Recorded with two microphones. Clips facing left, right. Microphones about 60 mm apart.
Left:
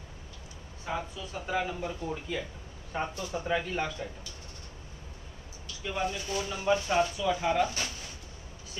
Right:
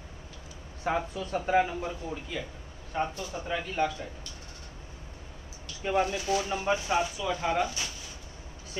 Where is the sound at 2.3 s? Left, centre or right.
Centre.